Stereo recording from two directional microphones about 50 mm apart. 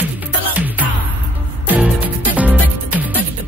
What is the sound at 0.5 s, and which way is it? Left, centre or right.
Music, right.